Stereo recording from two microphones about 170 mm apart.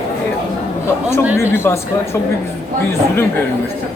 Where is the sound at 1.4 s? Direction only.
15° left (ahead or behind).